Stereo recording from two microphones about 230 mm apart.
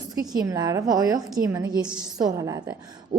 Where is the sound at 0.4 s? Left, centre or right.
Centre.